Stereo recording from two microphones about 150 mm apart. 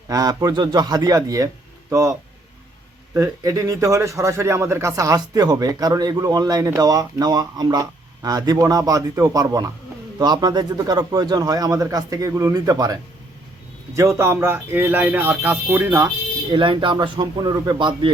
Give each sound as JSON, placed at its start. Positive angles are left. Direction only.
{"t": 0.1, "sound": "speech", "side_deg": -25}
{"t": 3.2, "sound": "speech", "side_deg": -20}
{"t": 14.2, "sound": "speech", "side_deg": -15}
{"t": 16.5, "sound": "speech", "side_deg": -35}